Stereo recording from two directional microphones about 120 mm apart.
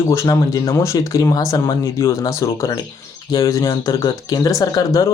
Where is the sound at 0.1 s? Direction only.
25° left (ahead or behind).